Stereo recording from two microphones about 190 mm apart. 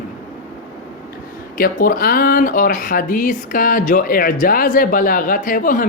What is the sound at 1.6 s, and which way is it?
Speech, 45° left (ahead or behind).